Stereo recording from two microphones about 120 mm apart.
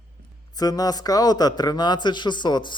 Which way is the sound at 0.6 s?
30° left (ahead or behind).